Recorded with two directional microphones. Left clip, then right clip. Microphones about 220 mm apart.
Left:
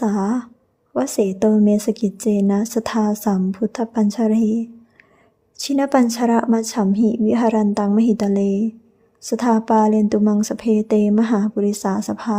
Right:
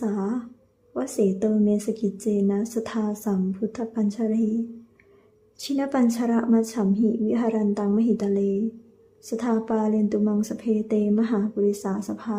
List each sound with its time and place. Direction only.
0.0 s speech: 40° left (ahead or behind)
5.5 s speech: 35° left (ahead or behind)